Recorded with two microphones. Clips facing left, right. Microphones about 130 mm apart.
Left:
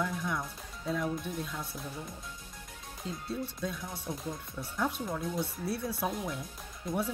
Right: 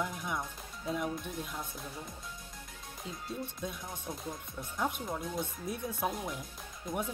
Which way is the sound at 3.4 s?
15° right (ahead or behind).